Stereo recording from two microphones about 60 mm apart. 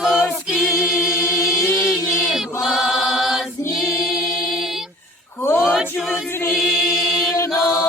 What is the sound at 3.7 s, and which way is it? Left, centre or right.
Music, centre.